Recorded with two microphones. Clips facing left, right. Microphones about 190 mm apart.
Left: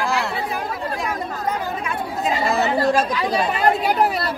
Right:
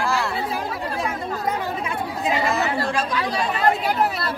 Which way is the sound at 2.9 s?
45° left (ahead or behind).